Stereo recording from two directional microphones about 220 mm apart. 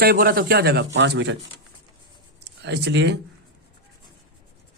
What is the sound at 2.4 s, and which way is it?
Speech, 50° right (ahead or behind).